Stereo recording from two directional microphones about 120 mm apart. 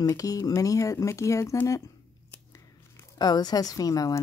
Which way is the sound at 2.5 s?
30° left (ahead or behind).